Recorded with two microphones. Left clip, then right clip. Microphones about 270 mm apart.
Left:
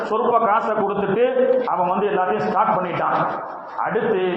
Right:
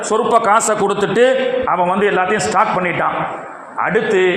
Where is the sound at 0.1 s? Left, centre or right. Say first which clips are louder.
Right 5 dB; right.